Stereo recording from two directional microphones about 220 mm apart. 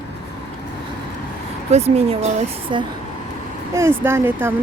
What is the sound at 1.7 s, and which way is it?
Speech, 30° right (ahead or behind).